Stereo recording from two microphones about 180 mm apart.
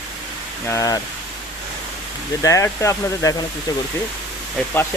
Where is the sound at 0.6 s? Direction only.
20° left (ahead or behind).